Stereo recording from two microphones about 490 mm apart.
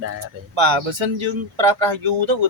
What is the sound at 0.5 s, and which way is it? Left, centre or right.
Speech, right.